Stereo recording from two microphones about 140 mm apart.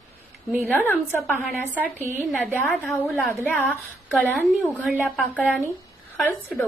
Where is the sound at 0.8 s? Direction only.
15° left (ahead or behind).